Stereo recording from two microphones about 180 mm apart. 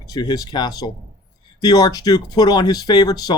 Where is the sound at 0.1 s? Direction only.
20° left (ahead or behind).